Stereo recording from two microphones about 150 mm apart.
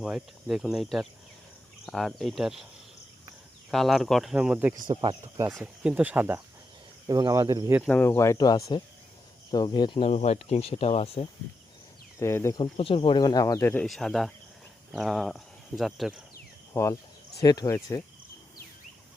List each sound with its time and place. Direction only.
0.0 s speech: centre (ahead or behind)
3.7 s speech: centre (ahead or behind)
4.9 s speech: 25° right (ahead or behind)
5.5 s speech: 5° right (ahead or behind)
7.1 s speech: 25° right (ahead or behind)
7.9 s speech: 15° left (ahead or behind); by 10.0 s 30° left (ahead or behind)
10.0 s speech: 45° left (ahead or behind)
12.2 s speech: 20° left (ahead or behind)
12.7 s speech: 35° left (ahead or behind); by 13.8 s 15° left (ahead or behind)
13.8 s speech: centre (ahead or behind)
16.7 s speech: 20° left (ahead or behind)